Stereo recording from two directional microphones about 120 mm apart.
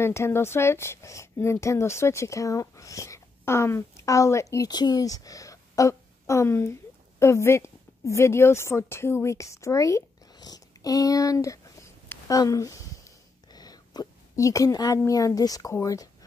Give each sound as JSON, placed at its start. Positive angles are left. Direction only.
{"t": 0.0, "sound": "a woman's voice", "side_deg": 20}